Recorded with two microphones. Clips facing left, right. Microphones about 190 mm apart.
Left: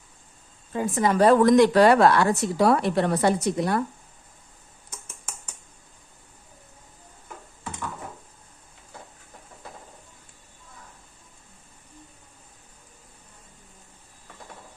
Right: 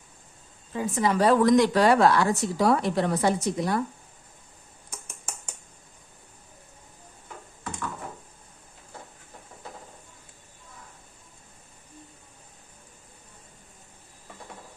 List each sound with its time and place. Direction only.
0.7 s a woman's voice: 50° left (ahead or behind)